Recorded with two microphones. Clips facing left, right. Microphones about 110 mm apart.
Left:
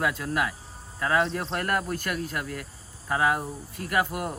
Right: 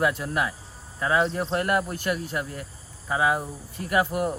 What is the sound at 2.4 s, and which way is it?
Speech, 25° right (ahead or behind).